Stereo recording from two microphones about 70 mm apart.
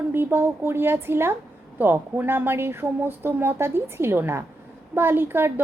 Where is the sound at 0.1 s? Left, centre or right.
Right.